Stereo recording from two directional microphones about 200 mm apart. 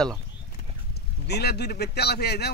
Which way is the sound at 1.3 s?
55° left (ahead or behind).